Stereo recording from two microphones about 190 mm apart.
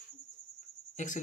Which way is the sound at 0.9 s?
40° left (ahead or behind).